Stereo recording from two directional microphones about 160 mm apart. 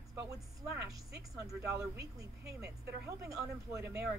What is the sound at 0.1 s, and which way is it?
Speech, 20° right (ahead or behind).